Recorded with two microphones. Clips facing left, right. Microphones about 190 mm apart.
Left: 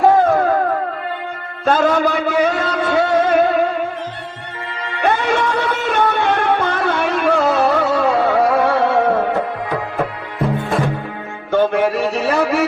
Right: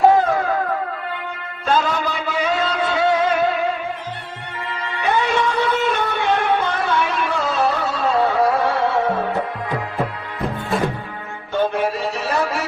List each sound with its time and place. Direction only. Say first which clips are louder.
0.2 s dog: left 5 dB; 55° left (ahead or behind)
1.6 s a sound: left 5 dB; 50° left (ahead or behind)
5.0 s music: left 2 dB; 55° left (ahead or behind)
11.5 s a man's voice: left 5 dB; 60° left (ahead or behind)